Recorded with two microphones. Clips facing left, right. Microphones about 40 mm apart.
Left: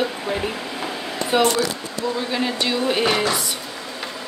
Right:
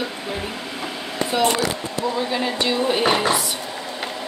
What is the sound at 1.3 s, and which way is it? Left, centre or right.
Speech, left.